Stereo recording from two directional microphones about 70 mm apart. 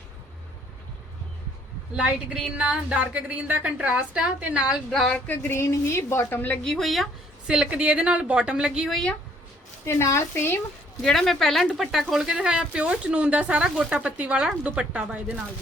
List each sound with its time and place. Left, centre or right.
2.0 s a woman's voice: centre
4.9 s speech: centre
5.1 s a sound: left
5.5 s a woman's voice: left
6.6 s speech: centre
7.4 s speech: centre
9.8 s a woman's voice: left
11.0 s speech: centre
14.0 s a woman's voice: centre